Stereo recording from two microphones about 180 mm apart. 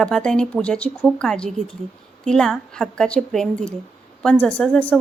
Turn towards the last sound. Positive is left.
turn(degrees=10)  # may be behind; listen again after turning